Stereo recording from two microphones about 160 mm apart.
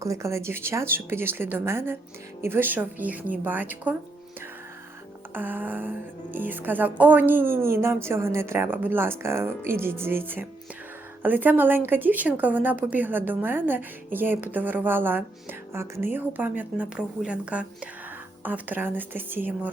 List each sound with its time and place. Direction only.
0.0 s a woman's voice: 20° right (ahead or behind)
5.3 s a woman's voice: 10° right (ahead or behind)